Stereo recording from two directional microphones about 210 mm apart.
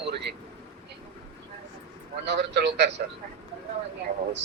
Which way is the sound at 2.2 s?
55° right (ahead or behind).